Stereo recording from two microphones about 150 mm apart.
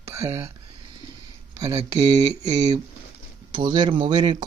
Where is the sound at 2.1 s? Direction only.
45° right (ahead or behind).